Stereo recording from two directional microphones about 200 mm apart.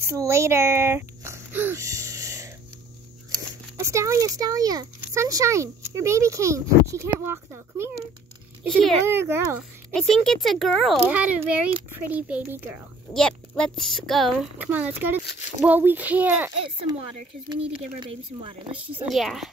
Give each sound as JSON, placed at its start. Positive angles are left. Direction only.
{"t": 0.0, "sound": "a sound", "side_deg": -15}
{"t": 3.3, "sound": "speech", "side_deg": -15}
{"t": 8.7, "sound": "speech", "side_deg": 0}
{"t": 9.0, "sound": "speech", "side_deg": -10}
{"t": 9.9, "sound": "speech", "side_deg": 0}
{"t": 13.1, "sound": "speech", "side_deg": 0}
{"t": 18.0, "sound": "speech", "side_deg": -25}
{"t": 19.0, "sound": "speech", "side_deg": 0}